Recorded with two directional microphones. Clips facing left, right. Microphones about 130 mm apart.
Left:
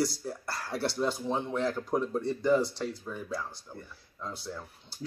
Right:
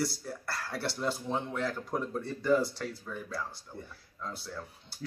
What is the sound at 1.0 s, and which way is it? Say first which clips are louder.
Speech: left 2 dB; 20° left (ahead or behind).